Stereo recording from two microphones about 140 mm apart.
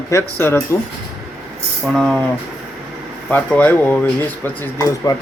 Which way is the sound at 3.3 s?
10° left (ahead or behind).